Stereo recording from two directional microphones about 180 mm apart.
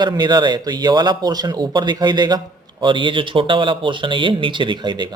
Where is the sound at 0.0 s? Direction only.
25° right (ahead or behind).